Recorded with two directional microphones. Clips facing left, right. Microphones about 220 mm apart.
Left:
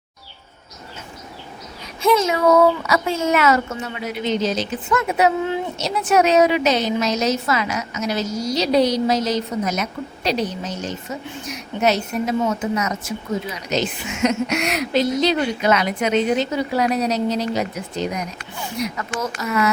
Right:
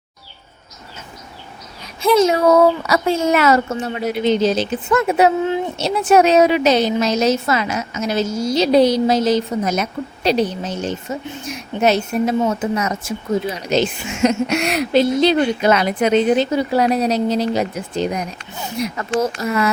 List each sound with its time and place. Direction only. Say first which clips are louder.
2.1 s a woman's voice: right 4 dB; 35° right (ahead or behind)